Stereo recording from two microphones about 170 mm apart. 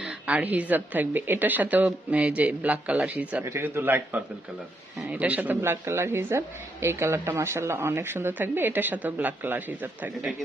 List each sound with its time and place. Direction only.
0.0 s a woman's voice: 10° right (ahead or behind)